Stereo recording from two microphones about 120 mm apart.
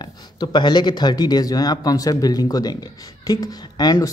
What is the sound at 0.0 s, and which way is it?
Speech, 40° left (ahead or behind).